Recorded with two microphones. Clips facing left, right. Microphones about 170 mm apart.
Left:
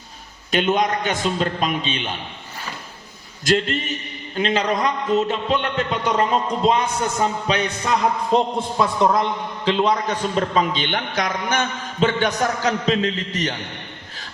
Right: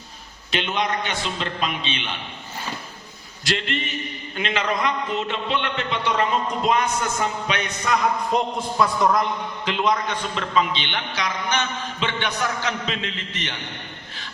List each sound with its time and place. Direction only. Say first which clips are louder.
0.5 s a man's voice: left 5 dB; 45° left (ahead or behind)
3.4 s a man's voice: left 6 dB; 45° left (ahead or behind)